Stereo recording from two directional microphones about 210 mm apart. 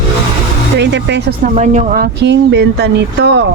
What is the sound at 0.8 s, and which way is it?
Speech, 55° right (ahead or behind).